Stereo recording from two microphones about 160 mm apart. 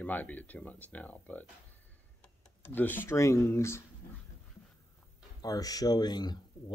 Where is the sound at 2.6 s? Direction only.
10° left (ahead or behind).